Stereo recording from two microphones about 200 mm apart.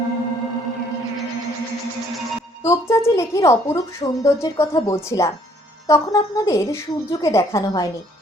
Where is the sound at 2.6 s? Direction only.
15° left (ahead or behind).